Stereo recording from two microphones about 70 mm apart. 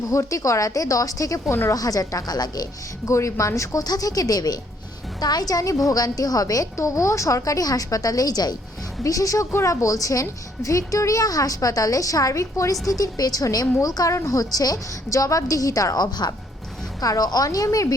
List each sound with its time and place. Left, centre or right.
0.1 s a woman's voice: left
3.1 s speech: left
3.8 s a woman's voice: left
9.0 s speech: left
12.8 s a woman's voice: left
17.0 s a woman's voice: left